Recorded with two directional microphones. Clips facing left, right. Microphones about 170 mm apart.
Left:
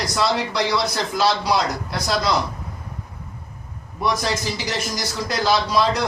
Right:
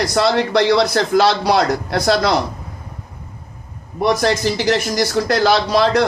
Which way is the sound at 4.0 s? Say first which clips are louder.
Right 7 dB; 65° right (ahead or behind).